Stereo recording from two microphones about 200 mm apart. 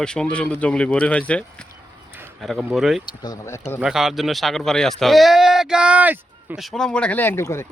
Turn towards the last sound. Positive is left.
turn(degrees=15)  # may be behind; listen again after turning